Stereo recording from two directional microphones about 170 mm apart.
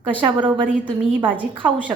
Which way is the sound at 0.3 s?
30° right (ahead or behind).